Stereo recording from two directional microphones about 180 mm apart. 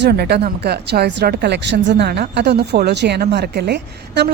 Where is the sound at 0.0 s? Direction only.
65° right (ahead or behind).